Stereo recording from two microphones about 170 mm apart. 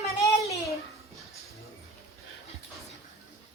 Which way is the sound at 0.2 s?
20° left (ahead or behind).